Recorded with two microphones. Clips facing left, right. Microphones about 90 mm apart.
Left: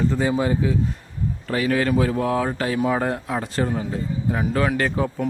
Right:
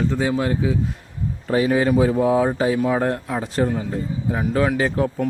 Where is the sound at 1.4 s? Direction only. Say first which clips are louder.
Right 3 dB; 20° right (ahead or behind).